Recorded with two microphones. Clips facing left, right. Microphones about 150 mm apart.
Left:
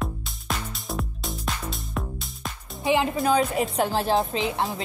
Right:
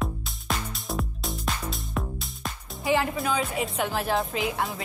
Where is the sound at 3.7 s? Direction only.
30° left (ahead or behind).